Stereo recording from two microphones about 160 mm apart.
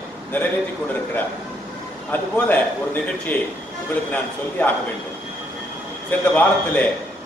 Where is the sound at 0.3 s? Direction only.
10° left (ahead or behind).